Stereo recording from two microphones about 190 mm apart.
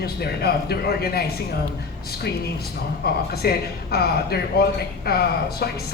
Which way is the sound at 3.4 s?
55° left (ahead or behind).